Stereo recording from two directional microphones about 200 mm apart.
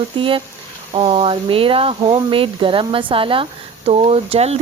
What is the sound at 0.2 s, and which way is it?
Speech, 25° right (ahead or behind).